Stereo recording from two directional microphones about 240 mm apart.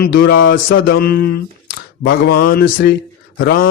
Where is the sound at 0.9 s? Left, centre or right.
Left.